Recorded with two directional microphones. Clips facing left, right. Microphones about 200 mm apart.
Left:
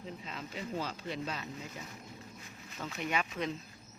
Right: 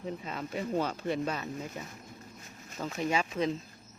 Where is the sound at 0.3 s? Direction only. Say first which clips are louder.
Right 6 dB; 55° right (ahead or behind).